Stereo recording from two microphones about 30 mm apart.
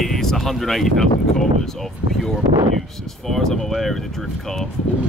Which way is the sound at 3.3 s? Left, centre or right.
Centre.